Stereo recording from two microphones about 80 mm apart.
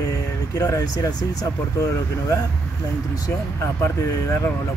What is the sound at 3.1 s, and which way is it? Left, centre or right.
Speech, left.